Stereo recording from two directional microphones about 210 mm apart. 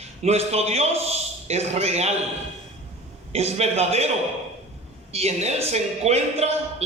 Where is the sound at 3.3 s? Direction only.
30° right (ahead or behind).